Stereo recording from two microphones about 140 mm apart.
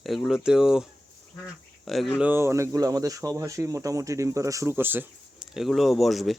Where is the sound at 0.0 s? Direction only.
Centre (ahead or behind).